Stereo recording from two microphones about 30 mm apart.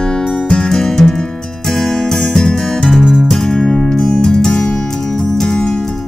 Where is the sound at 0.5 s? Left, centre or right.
Left.